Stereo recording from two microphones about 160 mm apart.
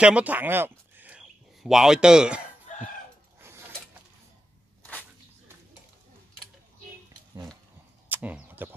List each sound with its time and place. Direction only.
0.0 s speech: 10° right (ahead or behind)
3.3 s mechanisms: 15° right (ahead or behind)
8.1 s a sound: 10° right (ahead or behind)